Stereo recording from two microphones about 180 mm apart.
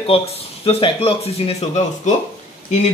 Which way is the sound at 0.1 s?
30° left (ahead or behind).